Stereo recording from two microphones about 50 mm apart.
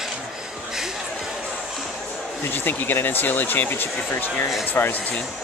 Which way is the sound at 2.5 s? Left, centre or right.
Left.